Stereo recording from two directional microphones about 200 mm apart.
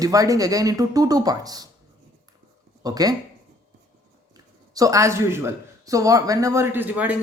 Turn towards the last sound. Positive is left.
turn(degrees=-5)  # may be behind; listen again after turning